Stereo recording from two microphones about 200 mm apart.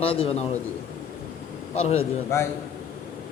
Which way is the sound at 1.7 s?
30° left (ahead or behind).